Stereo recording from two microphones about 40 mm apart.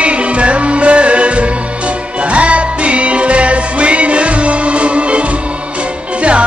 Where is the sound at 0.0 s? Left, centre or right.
Right.